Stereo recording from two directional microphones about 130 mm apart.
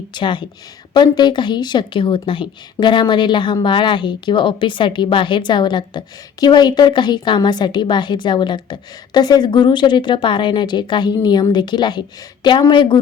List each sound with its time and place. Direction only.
0.1 s a woman's voice: 35° left (ahead or behind)